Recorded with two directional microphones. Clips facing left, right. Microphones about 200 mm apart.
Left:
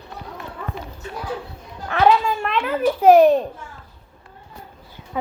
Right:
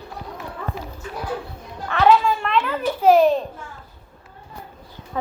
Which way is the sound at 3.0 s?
65° left (ahead or behind).